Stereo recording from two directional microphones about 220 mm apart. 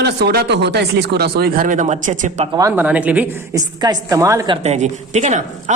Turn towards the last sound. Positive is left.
turn(degrees=-30)  # may be behind; listen again after turning